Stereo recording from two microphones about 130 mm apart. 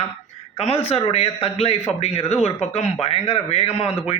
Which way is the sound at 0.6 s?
50° left (ahead or behind).